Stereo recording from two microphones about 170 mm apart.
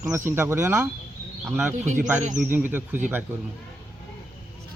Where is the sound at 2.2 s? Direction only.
50° right (ahead or behind).